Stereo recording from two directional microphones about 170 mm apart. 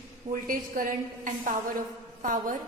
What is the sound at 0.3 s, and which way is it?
A woman's voice, 55° right (ahead or behind).